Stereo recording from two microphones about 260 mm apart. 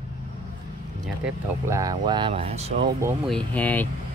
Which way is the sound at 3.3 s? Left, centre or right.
Centre.